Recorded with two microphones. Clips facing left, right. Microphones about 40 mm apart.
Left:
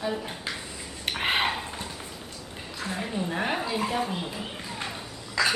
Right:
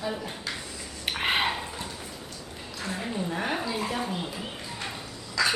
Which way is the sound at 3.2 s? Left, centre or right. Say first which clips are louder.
Left 1 dB; centre.